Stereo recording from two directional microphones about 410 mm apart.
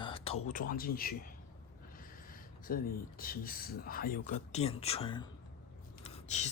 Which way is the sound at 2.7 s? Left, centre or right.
Left.